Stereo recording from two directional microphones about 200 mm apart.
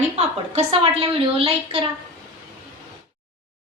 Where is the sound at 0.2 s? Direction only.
30° right (ahead or behind).